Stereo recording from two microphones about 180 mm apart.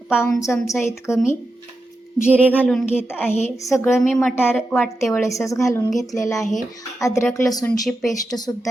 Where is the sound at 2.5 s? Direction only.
5° left (ahead or behind).